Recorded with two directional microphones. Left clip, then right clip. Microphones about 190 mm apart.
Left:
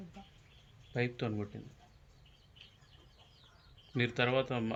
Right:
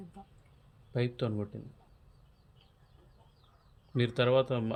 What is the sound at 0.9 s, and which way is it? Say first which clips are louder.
Speech: right 2 dB; 60° right (ahead or behind).